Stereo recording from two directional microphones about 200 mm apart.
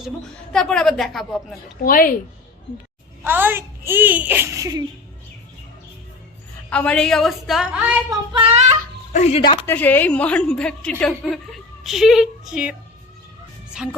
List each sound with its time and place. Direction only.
0.5 s a woman's voice: 5° left (ahead or behind)
1.8 s speech: 45° left (ahead or behind)
3.2 s a child's voice: 10° right (ahead or behind)
6.7 s a woman's voice: 5° left (ahead or behind)
8.1 s child singing: 25° right (ahead or behind)
9.1 s speech: 30° left (ahead or behind)
9.6 s a woman's voice: 10° left (ahead or behind)